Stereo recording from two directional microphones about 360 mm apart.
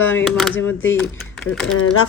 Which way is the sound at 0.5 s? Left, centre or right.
Left.